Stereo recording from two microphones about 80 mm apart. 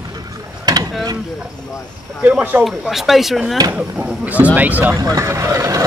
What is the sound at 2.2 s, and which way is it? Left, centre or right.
Speech, centre.